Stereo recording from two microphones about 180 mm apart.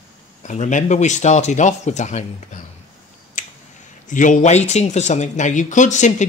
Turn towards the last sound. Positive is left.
turn(degrees=40)  # may be behind; listen again after turning